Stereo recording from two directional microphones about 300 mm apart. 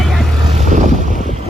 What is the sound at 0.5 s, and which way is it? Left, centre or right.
Boat, right.